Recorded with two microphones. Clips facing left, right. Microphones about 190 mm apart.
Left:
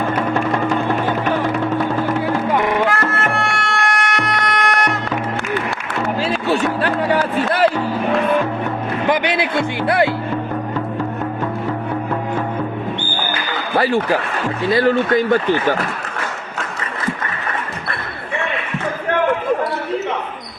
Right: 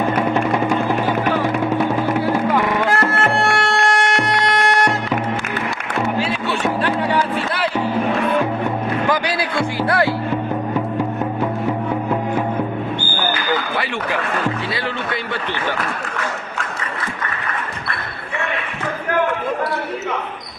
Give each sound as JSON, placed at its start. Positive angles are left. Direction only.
{"t": 0.0, "sound": "music", "side_deg": -10}
{"t": 2.9, "sound": "music", "side_deg": -30}
{"t": 6.1, "sound": "music", "side_deg": 35}
{"t": 9.0, "sound": "music", "side_deg": 20}
{"t": 13.7, "sound": "a sound", "side_deg": 35}
{"t": 14.7, "sound": "speech", "side_deg": 45}